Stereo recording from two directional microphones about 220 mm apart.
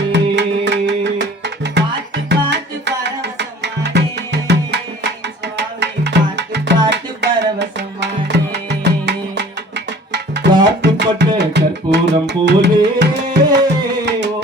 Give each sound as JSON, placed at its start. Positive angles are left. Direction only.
{"t": 0.1, "sound": "music", "side_deg": -50}